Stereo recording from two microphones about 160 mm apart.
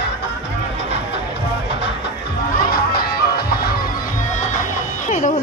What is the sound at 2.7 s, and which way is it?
Music, 70° left (ahead or behind).